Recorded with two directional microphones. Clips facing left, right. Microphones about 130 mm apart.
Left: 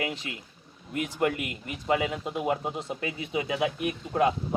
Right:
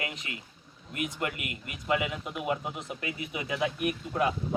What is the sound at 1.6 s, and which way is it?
Speech, 30° left (ahead or behind).